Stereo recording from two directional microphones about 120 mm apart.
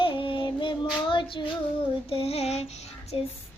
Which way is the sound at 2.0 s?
55° left (ahead or behind).